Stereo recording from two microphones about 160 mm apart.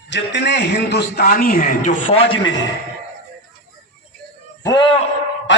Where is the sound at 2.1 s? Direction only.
35° left (ahead or behind).